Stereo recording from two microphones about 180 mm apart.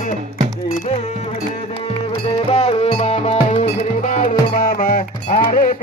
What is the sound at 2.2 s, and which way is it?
Music, 35° left (ahead or behind).